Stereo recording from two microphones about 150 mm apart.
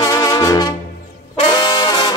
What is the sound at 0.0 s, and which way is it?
Music, 20° left (ahead or behind).